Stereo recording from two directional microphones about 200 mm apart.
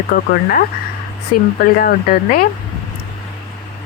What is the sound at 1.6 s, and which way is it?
Speech, 45° left (ahead or behind).